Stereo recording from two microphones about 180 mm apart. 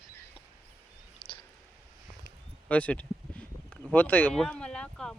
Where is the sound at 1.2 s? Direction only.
25° left (ahead or behind).